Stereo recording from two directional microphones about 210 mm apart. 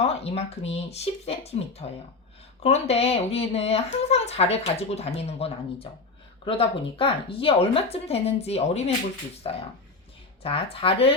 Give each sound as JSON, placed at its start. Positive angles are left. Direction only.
{"t": 0.0, "sound": "speech", "side_deg": 30}
{"t": 10.4, "sound": "speech", "side_deg": 25}